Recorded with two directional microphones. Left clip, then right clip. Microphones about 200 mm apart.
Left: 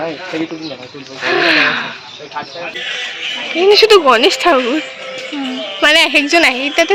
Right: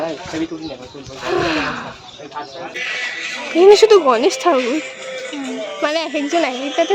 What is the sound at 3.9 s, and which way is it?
A woman's voice, 5° right (ahead or behind).